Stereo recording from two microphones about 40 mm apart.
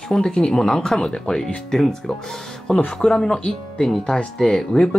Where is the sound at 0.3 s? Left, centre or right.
Left.